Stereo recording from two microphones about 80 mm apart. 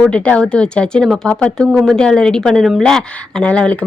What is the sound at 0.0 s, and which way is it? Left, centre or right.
A woman's voice, centre.